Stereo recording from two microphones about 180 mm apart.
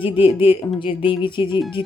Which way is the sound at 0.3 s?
30° left (ahead or behind).